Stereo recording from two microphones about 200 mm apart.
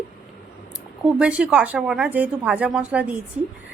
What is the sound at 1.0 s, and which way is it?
A woman's voice, 5° right (ahead or behind).